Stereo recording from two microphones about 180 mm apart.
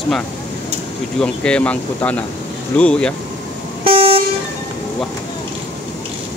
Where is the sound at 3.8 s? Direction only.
30° right (ahead or behind).